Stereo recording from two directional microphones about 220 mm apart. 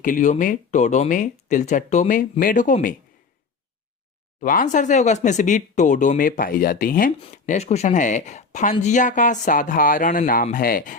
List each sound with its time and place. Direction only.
0.0 s speech: 35° left (ahead or behind)
4.4 s speech: 35° left (ahead or behind)